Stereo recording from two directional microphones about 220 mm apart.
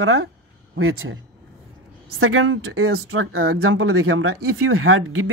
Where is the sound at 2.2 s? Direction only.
70° right (ahead or behind).